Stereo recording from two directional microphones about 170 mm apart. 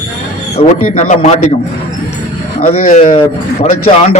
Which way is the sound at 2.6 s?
50° left (ahead or behind).